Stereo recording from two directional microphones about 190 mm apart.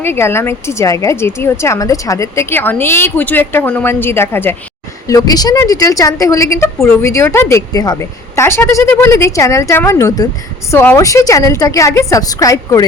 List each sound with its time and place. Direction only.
0.0 s speech: 10° left (ahead or behind)